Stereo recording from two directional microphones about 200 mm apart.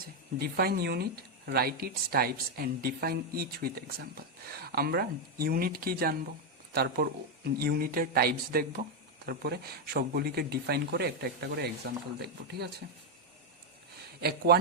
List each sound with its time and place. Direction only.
0.3 s speech: 50° right (ahead or behind)
14.2 s speech: 50° right (ahead or behind)